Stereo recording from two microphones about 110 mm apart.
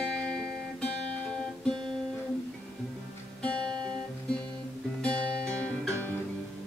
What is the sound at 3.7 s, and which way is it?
Guitar, 40° right (ahead or behind).